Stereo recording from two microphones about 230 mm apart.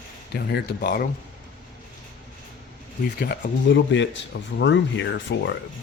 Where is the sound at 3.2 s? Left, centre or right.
Left.